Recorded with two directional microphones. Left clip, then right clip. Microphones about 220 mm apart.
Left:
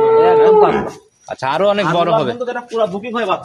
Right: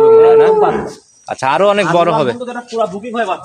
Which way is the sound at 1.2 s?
40° right (ahead or behind).